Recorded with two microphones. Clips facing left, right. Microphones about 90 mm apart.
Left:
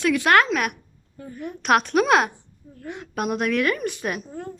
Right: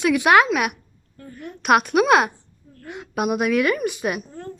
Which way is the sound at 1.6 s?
5° right (ahead or behind).